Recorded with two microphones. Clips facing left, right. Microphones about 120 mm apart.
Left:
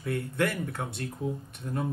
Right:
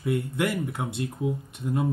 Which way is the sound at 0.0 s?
15° right (ahead or behind).